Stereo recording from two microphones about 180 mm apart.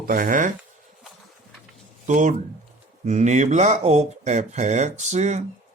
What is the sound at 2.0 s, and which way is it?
Speech, 40° right (ahead or behind).